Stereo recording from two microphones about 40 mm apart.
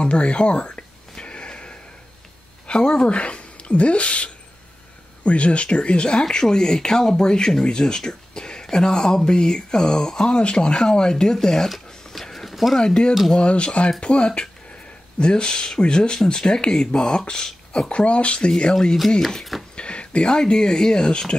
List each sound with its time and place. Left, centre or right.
0.0 s speech: left
1.2 s a sound: left
2.6 s speech: left; by 11.7 s centre
12.1 s walk: centre
12.7 s speech: left
17.8 s speech: left
19.2 s speech: centre
19.7 s speech: left